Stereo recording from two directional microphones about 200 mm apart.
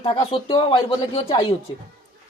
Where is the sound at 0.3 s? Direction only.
25° left (ahead or behind).